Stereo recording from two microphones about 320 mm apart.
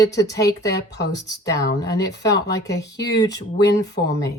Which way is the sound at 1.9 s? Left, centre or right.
Centre.